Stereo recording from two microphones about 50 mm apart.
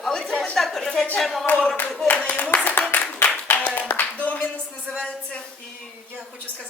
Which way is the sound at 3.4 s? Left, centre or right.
Left.